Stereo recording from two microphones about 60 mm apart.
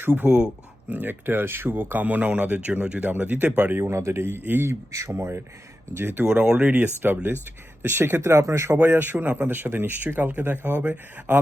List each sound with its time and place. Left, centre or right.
0.0 s speech: right
0.3 s speech: centre
0.9 s speech: right
3.7 s speech: right
4.9 s speech: right
5.1 s speech: right
6.2 s speech: centre
6.7 s speech: right
8.7 s speech: right